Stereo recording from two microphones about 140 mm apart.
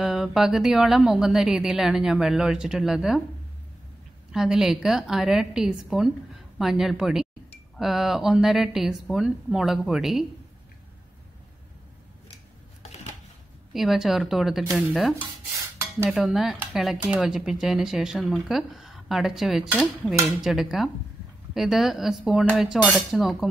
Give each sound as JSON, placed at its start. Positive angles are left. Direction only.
{"t": 0.0, "sound": "speech", "side_deg": -5}
{"t": 4.3, "sound": "speech", "side_deg": -5}
{"t": 12.8, "sound": "typewriter", "side_deg": 50}
{"t": 13.7, "sound": "speech", "side_deg": 0}
{"t": 16.1, "sound": "speech", "side_deg": -5}